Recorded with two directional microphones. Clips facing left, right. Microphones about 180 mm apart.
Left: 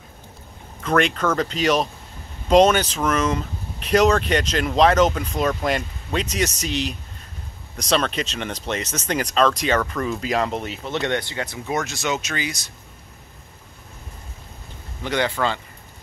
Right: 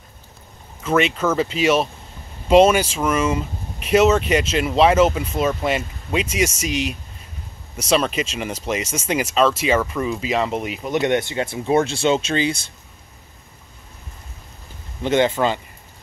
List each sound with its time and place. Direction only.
0.8 s speech: 5° right (ahead or behind); by 12.6 s 30° right (ahead or behind)
15.0 s speech: 20° right (ahead or behind)